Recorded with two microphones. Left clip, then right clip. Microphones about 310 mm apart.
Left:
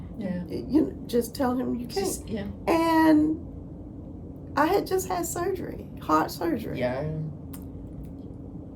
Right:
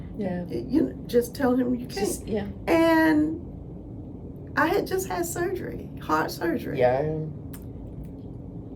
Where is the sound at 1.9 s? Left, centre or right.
Right.